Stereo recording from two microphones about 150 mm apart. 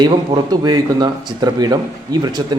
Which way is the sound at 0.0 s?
30° right (ahead or behind).